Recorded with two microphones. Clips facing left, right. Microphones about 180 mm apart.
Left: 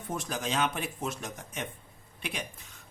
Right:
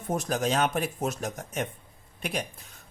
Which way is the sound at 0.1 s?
45° right (ahead or behind).